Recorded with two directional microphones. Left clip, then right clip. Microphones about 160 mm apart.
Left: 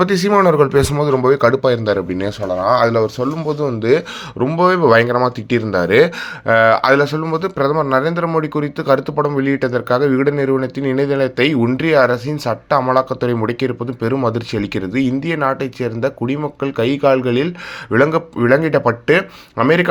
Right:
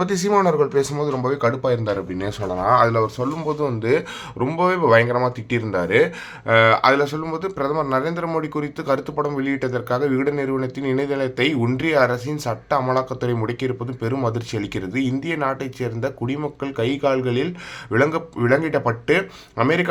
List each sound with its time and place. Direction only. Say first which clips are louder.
0.0 s speech: left 5 dB; 20° left (ahead or behind)
0.5 s speech: left 6 dB; 35° left (ahead or behind)
2.5 s speech: left 3 dB; 10° left (ahead or behind); by 19.9 s 30° left (ahead or behind)